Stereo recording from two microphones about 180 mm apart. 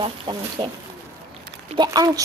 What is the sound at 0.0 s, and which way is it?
Speech, 25° right (ahead or behind).